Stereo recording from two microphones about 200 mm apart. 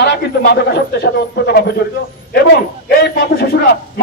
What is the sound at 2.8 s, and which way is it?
Speech, 50° left (ahead or behind).